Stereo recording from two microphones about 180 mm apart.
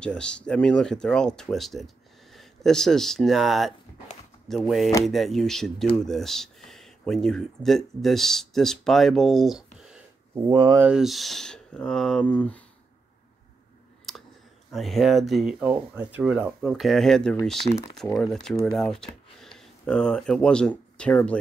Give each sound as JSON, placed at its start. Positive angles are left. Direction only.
{"t": 0.0, "sound": "speech", "side_deg": 5}
{"t": 9.8, "sound": "a sound", "side_deg": -5}
{"t": 10.5, "sound": "speech", "side_deg": -25}
{"t": 10.8, "sound": "speech", "side_deg": -5}
{"t": 14.1, "sound": "clicking", "side_deg": 0}
{"t": 14.7, "sound": "speech", "side_deg": 0}